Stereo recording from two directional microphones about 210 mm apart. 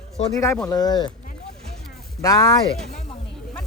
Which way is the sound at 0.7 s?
20° left (ahead or behind).